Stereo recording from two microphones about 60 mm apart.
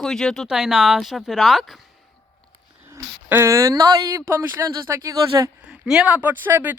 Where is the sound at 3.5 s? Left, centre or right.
Right.